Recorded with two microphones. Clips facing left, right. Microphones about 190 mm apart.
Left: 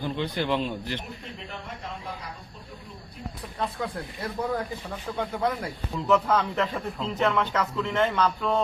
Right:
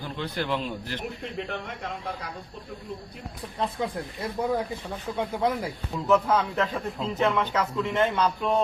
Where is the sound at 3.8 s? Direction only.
25° right (ahead or behind).